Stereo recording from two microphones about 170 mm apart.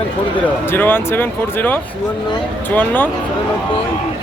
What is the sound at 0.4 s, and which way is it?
Speech, 10° left (ahead or behind).